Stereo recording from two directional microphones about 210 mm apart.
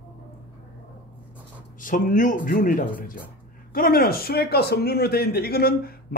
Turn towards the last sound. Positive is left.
turn(degrees=45)  # may be behind; listen again after turning